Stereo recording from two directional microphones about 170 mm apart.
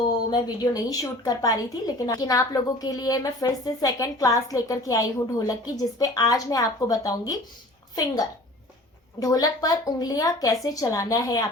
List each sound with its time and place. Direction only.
0.1 s a woman's voice: 25° left (ahead or behind)